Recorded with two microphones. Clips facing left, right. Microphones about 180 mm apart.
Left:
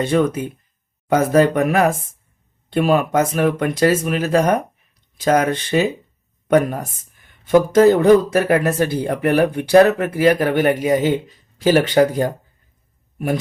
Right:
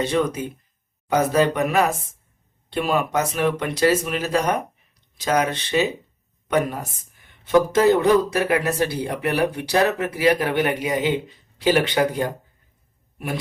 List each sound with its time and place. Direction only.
0.0 s a man's voice: 55° left (ahead or behind)